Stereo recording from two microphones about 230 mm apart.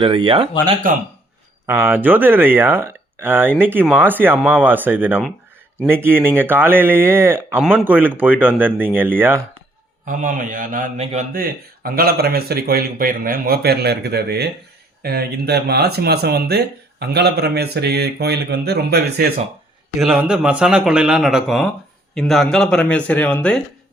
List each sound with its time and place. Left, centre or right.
0.0 s speech: right
0.9 s speech: right
1.6 s speech: centre
10.1 s speech: right
20.0 s a man's voice: centre